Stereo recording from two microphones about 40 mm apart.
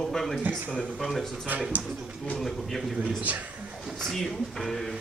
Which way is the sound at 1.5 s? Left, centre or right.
Right.